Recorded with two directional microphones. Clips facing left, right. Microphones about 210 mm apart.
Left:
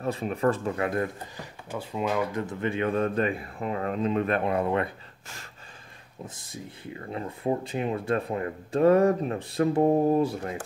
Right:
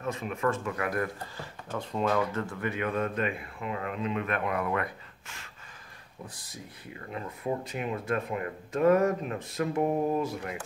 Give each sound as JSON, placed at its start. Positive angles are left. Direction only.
{"t": 0.0, "sound": "speech", "side_deg": 35}